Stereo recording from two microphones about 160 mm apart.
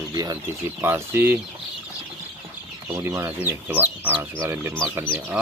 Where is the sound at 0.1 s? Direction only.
20° right (ahead or behind).